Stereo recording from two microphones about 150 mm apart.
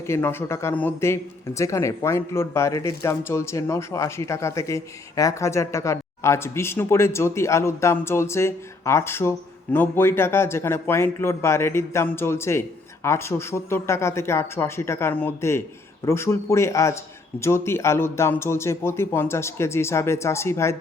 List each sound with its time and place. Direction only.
0.1 s speech: 15° left (ahead or behind)